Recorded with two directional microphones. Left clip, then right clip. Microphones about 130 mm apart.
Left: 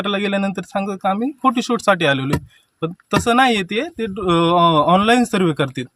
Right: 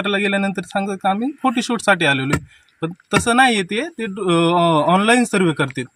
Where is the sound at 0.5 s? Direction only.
5° left (ahead or behind).